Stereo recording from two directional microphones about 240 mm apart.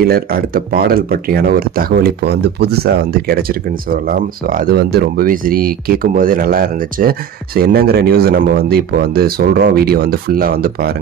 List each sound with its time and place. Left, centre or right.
0.0 s speech: right